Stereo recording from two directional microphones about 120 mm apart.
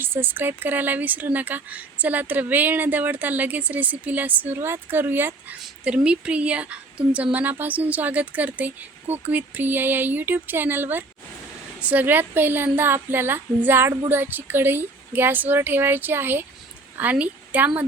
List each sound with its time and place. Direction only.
0.0 s a woman's voice: 20° right (ahead or behind)